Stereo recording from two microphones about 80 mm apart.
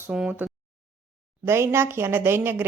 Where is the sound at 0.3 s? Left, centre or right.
Right.